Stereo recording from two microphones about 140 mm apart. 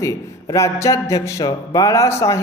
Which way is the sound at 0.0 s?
25° left (ahead or behind).